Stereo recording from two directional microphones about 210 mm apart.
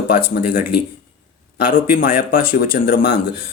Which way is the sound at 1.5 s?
40° left (ahead or behind).